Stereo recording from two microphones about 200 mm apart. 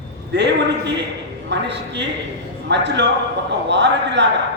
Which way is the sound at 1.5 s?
60° right (ahead or behind).